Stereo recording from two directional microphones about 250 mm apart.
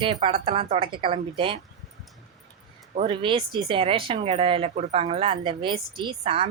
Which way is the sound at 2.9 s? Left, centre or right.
Right.